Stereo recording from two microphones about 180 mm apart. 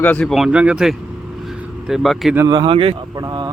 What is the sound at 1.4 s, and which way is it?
Vehicle, centre (ahead or behind).